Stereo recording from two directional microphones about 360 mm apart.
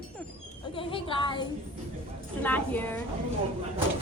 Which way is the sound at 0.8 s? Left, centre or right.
Centre.